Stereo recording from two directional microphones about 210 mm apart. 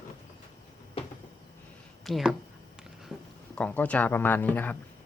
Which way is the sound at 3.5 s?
5° left (ahead or behind).